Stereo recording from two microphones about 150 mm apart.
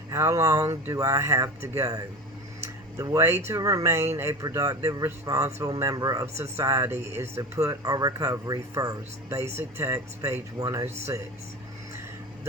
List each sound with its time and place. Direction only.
0.1 s speech: 20° right (ahead or behind)